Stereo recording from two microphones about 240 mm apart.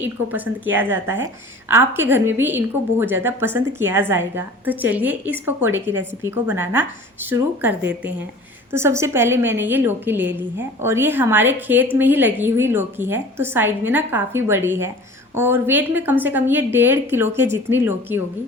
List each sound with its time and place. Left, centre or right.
0.0 s a woman's voice: centre